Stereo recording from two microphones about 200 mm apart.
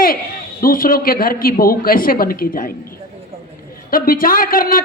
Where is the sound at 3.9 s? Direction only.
45° left (ahead or behind).